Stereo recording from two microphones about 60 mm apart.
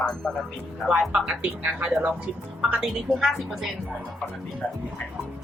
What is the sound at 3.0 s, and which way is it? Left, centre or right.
Speech, centre.